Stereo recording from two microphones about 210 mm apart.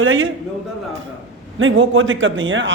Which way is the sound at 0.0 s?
70° right (ahead or behind).